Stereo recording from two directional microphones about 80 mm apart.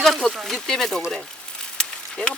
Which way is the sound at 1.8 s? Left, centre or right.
Centre.